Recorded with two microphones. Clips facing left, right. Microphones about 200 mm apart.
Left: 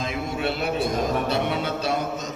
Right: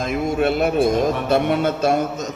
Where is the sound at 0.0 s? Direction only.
50° right (ahead or behind).